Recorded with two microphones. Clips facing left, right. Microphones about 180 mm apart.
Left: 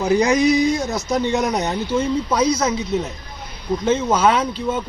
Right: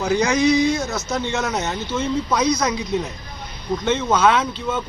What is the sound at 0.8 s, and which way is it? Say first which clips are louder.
Speech: left 3 dB; 15° left (ahead or behind).